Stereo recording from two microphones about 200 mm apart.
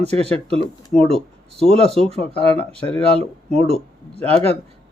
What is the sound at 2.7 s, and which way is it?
Speech, 5° left (ahead or behind).